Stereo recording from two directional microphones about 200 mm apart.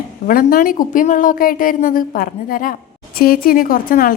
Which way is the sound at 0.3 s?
45° left (ahead or behind).